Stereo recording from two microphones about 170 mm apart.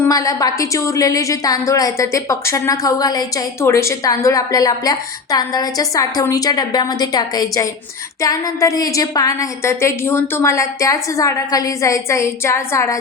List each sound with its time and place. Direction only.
0.1 s a woman's voice: 20° left (ahead or behind)